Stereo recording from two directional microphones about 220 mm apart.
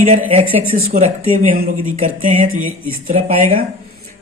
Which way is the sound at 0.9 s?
35° right (ahead or behind).